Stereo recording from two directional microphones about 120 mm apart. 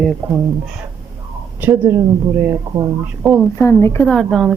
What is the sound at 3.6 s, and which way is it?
Speech, 20° left (ahead or behind).